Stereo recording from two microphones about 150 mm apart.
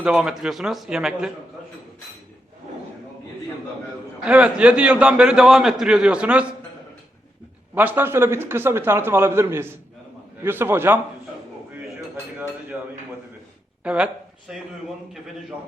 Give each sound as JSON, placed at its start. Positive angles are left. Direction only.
{"t": 0.0, "sound": "a man's voice", "side_deg": -5}
{"t": 4.3, "sound": "a man's voice", "side_deg": -5}
{"t": 7.8, "sound": "a man's voice", "side_deg": -15}
{"t": 12.7, "sound": "a man's voice", "side_deg": -10}